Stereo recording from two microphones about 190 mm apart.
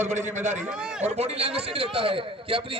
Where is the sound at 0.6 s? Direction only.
5° right (ahead or behind).